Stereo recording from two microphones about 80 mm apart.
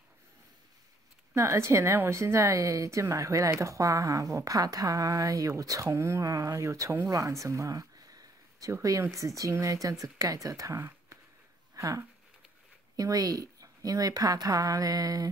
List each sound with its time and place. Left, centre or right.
1.3 s a woman's voice: right
11.7 s a sound: right
12.9 s a woman's voice: right